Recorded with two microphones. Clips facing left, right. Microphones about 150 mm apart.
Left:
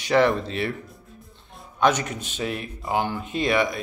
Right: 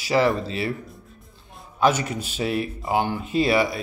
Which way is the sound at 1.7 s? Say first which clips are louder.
Right 1 dB; 5° right (ahead or behind).